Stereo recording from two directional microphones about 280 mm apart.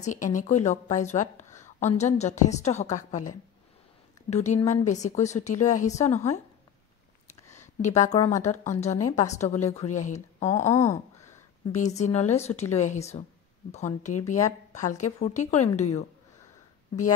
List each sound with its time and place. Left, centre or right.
0.0 s a woman's voice: left
7.4 s a sound: centre
7.8 s a woman's voice: left
8.5 s a woman's voice: centre
9.1 s a woman's voice: left
10.7 s a sound: centre
12.0 s a woman's voice: left